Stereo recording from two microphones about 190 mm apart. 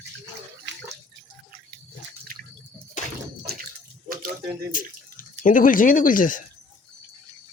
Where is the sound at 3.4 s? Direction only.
55° right (ahead or behind).